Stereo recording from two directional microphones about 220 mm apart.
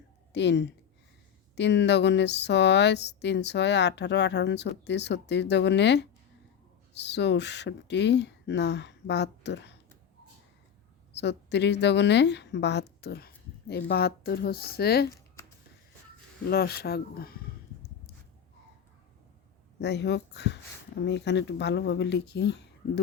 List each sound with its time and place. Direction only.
0.3 s speech: 50° left (ahead or behind)
11.1 s a woman's voice: 50° left (ahead or behind)
16.5 s speech: 45° left (ahead or behind)
19.8 s speech: 50° left (ahead or behind)